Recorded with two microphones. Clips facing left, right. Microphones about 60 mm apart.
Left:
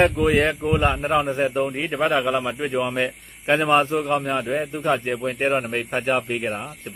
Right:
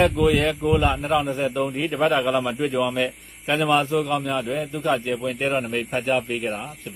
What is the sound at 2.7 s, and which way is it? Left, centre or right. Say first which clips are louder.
A man's voice: even; left.